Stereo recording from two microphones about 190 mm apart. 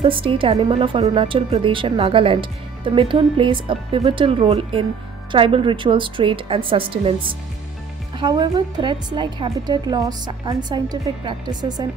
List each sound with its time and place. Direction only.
0.0 s a woman's voice: 25° right (ahead or behind)